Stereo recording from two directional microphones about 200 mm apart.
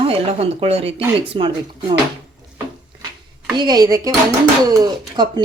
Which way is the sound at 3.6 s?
20° right (ahead or behind).